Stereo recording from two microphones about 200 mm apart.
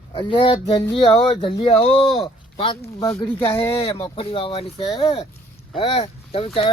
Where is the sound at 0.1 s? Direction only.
25° left (ahead or behind).